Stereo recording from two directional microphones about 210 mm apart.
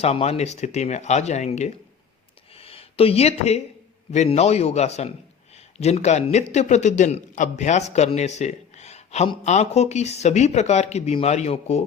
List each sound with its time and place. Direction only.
0.0 s a man's voice: 30° left (ahead or behind)